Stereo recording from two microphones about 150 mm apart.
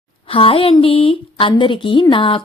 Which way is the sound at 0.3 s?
40° left (ahead or behind).